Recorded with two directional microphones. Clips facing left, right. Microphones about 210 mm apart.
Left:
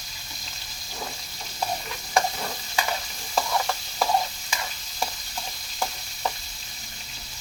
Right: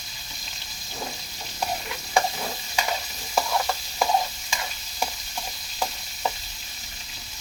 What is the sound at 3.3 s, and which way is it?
Stir, 5° right (ahead or behind).